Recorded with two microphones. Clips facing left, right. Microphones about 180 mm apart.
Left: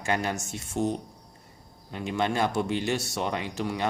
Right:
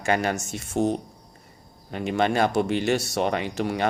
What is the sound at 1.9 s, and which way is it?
Speech, 70° right (ahead or behind).